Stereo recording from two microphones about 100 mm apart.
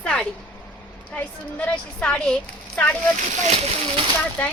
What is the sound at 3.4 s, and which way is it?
Speech, 90° right.